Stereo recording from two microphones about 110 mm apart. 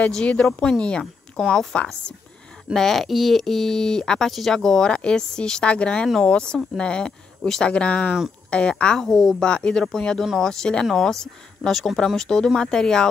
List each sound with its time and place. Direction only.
0.0 s a woman's voice: 10° left (ahead or behind)